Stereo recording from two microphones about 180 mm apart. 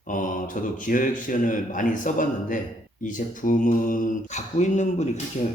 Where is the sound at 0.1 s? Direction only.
45° left (ahead or behind).